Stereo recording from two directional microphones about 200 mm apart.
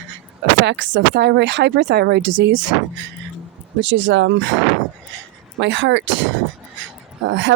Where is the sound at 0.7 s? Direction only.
65° right (ahead or behind).